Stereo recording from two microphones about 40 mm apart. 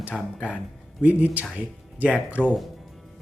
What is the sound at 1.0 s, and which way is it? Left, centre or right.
Speech, right.